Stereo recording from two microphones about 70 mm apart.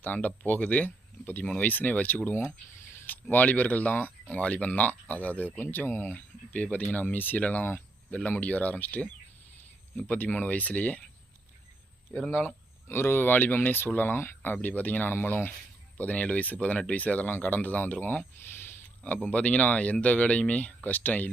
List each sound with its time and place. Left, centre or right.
0.0 s speech: left
3.1 s speech: left
10.2 s speech: left
12.1 s speech: centre
12.9 s speech: left; by 18.3 s centre
18.4 s a sound: left
19.0 s speech: centre